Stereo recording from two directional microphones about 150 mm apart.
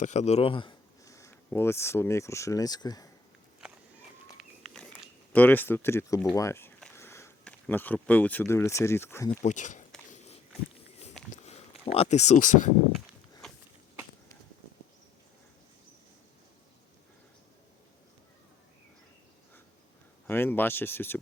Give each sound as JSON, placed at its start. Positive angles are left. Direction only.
{"t": 0.0, "sound": "a man's voice", "side_deg": 50}
{"t": 1.0, "sound": "speech", "side_deg": 20}
{"t": 5.3, "sound": "speech", "side_deg": 10}
{"t": 6.9, "sound": "a sound", "side_deg": 15}
{"t": 7.4, "sound": "speech", "side_deg": 10}
{"t": 9.4, "sound": "speech", "side_deg": 55}
{"t": 10.1, "sound": "walk", "side_deg": 45}
{"t": 11.3, "sound": "speech", "side_deg": 45}
{"t": 13.4, "sound": "a sound", "side_deg": 5}
{"t": 20.2, "sound": "speech", "side_deg": 15}